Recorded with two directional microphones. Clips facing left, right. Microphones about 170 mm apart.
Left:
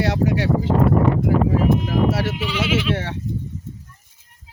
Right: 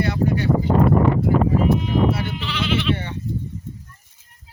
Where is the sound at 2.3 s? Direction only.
10° left (ahead or behind).